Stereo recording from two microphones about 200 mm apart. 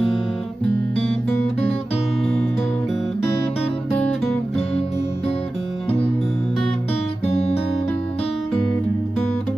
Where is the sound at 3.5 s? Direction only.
30° left (ahead or behind).